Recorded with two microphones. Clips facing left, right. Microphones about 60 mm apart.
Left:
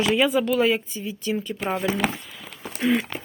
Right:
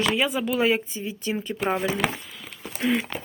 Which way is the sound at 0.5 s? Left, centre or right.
Right.